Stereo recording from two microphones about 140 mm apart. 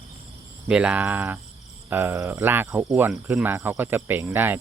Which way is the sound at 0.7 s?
10° right (ahead or behind).